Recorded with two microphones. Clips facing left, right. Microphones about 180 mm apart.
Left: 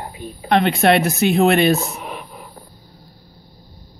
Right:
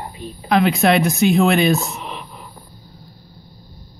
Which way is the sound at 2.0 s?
45° left (ahead or behind).